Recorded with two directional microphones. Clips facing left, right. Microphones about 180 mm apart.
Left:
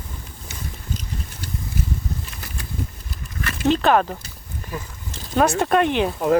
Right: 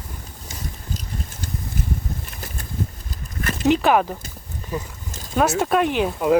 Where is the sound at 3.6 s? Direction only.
10° right (ahead or behind).